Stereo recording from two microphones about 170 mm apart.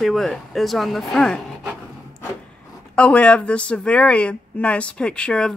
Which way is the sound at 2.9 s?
5° left (ahead or behind).